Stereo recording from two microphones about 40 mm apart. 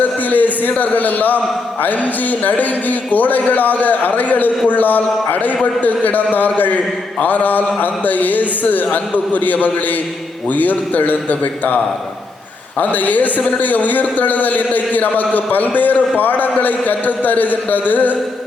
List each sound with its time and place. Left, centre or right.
0.0 s a sound: left
0.8 s a man's voice: left
12.8 s a man's voice: left